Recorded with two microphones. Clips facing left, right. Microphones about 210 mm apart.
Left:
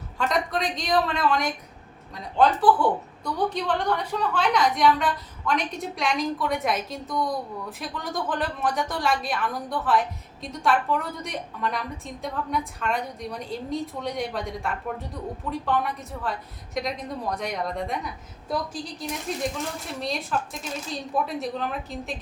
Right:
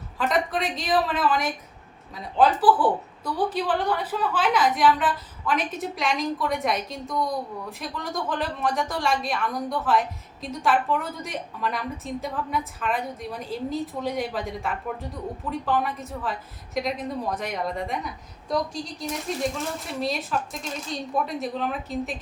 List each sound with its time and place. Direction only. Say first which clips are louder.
0.2 s a woman's voice: right 1 dB; centre (ahead or behind)